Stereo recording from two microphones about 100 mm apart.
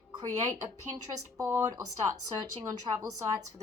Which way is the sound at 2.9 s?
50° right (ahead or behind).